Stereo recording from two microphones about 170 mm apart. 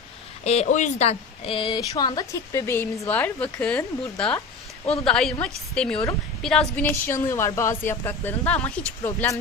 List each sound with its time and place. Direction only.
0.4 s a woman's voice: 40° left (ahead or behind); by 9.4 s 15° left (ahead or behind)